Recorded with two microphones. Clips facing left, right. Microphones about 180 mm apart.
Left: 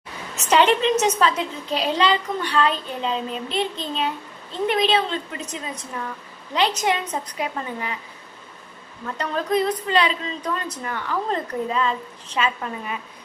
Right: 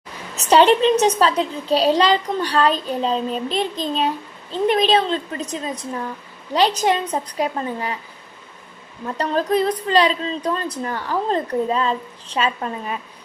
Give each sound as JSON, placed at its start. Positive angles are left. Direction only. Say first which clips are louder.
{"t": 0.3, "sound": "a woman's voice", "louder": "right 4 dB", "side_deg": -35}
{"t": 9.0, "sound": "a woman's voice", "louder": "right 4 dB", "side_deg": -30}